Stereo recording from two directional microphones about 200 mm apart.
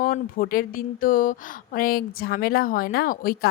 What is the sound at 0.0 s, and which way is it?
A woman's voice, 45° left (ahead or behind).